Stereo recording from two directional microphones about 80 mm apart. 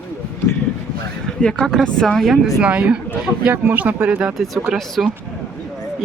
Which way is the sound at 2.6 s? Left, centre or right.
Centre.